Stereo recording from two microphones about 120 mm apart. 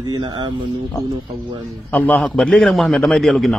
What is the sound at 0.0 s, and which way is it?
Speech, 40° right (ahead or behind).